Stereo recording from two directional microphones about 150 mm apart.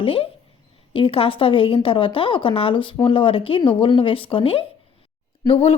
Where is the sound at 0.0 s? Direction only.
40° left (ahead or behind).